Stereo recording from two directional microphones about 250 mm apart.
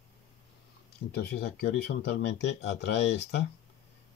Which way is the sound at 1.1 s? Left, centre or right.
Left.